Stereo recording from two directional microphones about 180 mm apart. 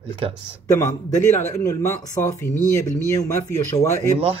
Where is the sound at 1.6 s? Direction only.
15° left (ahead or behind).